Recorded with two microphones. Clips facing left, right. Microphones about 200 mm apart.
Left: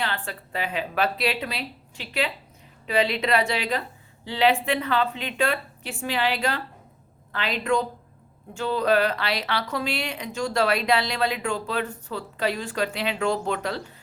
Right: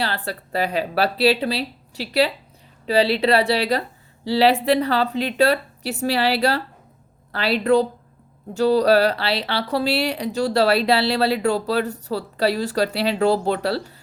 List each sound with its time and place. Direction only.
0.0 s speech: 35° right (ahead or behind)